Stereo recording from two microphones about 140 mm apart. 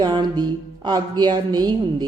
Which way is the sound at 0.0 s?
30° right (ahead or behind).